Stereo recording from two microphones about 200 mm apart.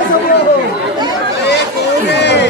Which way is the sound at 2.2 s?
60° left (ahead or behind).